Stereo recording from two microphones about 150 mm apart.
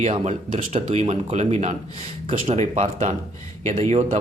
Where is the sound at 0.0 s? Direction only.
45° right (ahead or behind).